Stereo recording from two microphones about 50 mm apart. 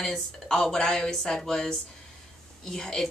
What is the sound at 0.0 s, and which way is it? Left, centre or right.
A woman's voice, centre.